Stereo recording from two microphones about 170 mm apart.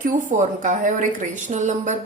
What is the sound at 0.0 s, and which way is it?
A woman's voice, 50° right (ahead or behind).